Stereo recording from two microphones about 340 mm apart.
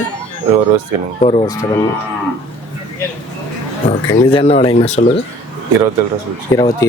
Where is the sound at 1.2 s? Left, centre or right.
Centre.